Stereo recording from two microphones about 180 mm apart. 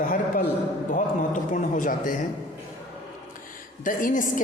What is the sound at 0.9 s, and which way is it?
A woman's voice, 45° left (ahead or behind).